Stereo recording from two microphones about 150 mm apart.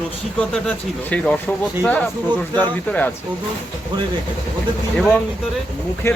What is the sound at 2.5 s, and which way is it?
Speech, 10° left (ahead or behind).